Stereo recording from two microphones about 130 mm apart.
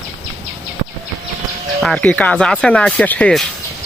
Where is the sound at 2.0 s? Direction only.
10° left (ahead or behind).